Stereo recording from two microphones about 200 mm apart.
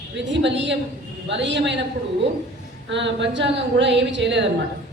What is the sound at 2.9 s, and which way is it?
A woman's voice, 65° right (ahead or behind).